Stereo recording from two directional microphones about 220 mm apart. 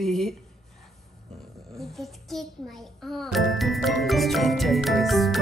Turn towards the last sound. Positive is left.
turn(degrees=0)  # may be behind; listen again after turning